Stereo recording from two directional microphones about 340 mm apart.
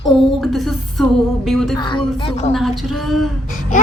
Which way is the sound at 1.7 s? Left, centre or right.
Centre.